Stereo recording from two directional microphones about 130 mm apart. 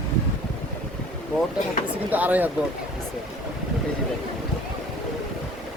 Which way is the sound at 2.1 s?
15° right (ahead or behind).